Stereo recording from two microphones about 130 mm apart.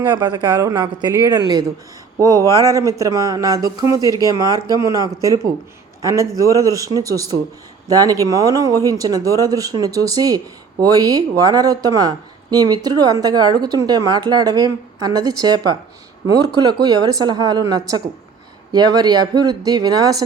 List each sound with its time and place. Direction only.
0.1 s speech: 35° right (ahead or behind)